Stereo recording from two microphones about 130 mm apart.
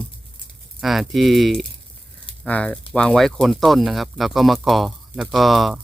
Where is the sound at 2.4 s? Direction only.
10° left (ahead or behind).